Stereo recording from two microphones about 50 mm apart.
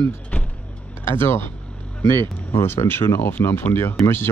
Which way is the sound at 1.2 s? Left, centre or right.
Left.